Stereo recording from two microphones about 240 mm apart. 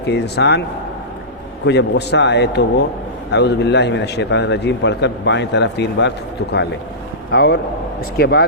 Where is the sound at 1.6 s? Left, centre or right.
Left.